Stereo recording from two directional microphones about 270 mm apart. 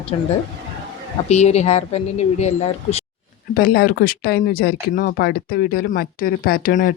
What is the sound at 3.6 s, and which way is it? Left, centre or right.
Speech, left.